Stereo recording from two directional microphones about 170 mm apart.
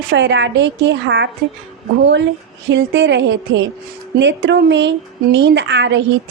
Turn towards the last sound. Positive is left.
turn(degrees=-90)